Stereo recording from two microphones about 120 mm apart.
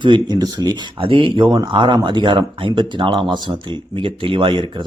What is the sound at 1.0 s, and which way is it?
Speech, 50° right (ahead or behind).